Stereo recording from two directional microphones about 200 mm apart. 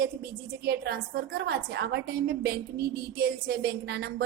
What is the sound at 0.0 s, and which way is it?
A woman's voice, 50° right (ahead or behind).